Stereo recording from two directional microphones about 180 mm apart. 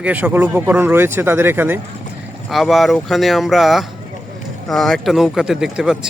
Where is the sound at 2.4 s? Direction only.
Centre (ahead or behind).